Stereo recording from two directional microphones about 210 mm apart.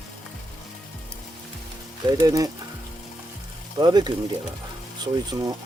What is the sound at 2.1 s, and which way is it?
Speech, 15° right (ahead or behind).